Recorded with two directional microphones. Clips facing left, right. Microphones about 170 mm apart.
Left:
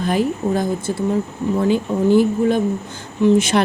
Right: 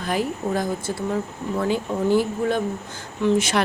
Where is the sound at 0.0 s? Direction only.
25° left (ahead or behind).